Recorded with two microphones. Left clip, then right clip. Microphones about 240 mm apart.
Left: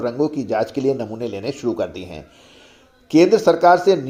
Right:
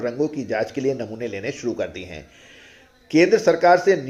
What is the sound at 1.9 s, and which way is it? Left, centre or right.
Speech, left.